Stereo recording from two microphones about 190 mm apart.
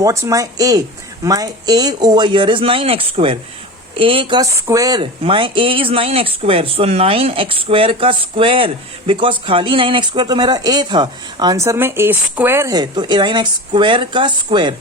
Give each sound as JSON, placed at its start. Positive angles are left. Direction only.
{"t": 0.0, "sound": "a woman's voice", "side_deg": -15}